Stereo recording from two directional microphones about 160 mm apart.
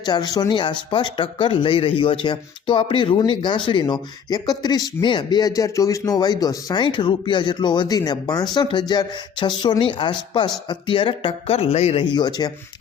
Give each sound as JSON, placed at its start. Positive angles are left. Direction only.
{"t": 0.0, "sound": "speech", "side_deg": 25}
{"t": 12.1, "sound": "speech", "side_deg": 25}